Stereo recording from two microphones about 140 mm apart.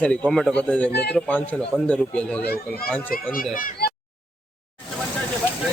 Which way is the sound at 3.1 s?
85° left.